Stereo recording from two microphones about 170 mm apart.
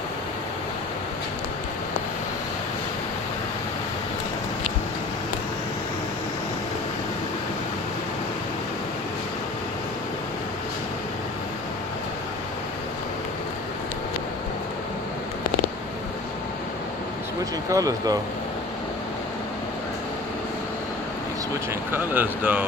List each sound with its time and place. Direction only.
17.6 s speech: 20° right (ahead or behind)
21.9 s speech: 10° right (ahead or behind)